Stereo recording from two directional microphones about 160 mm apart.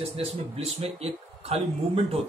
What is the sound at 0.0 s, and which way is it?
Speech, 35° right (ahead or behind).